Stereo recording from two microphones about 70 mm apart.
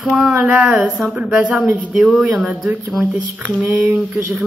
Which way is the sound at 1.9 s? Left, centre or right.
Centre.